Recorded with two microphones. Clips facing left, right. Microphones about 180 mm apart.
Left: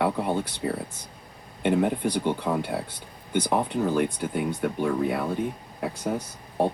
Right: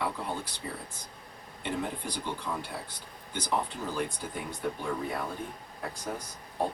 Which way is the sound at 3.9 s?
65° left (ahead or behind).